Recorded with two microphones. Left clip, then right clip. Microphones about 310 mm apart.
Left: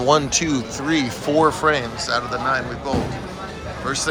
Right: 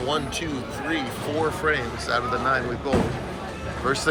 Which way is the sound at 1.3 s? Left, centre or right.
Left.